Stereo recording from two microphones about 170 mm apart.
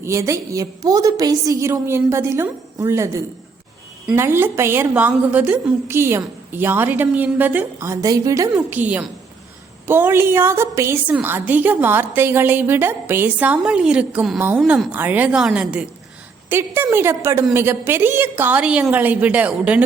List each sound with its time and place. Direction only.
0.0 s a woman's voice: 15° right (ahead or behind)
8.5 s a woman's voice: 10° right (ahead or behind)